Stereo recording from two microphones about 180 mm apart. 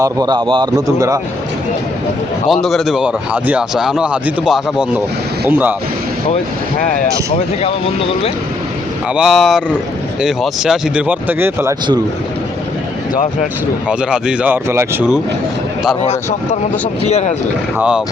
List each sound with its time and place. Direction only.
0.0 s speech: 20° right (ahead or behind)
2.5 s speech: centre (ahead or behind)
9.1 s speech: centre (ahead or behind)
13.8 s speech: 5° right (ahead or behind)
16.0 s a man's voice: 35° left (ahead or behind)
17.7 s speech: 5° right (ahead or behind)